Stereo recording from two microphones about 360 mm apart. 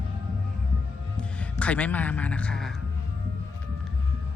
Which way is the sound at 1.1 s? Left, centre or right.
Centre.